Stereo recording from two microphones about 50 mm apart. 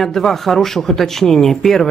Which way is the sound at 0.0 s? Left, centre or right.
Centre.